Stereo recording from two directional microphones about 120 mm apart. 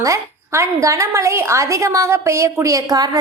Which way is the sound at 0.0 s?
25° right (ahead or behind).